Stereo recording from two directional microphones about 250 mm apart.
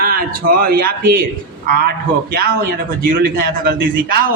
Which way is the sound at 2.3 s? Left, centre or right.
Right.